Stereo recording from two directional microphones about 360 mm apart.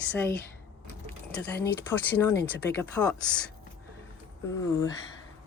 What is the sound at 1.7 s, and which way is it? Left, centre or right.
Speech, centre.